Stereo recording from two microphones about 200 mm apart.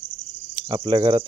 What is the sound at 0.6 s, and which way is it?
Speech, 25° right (ahead or behind).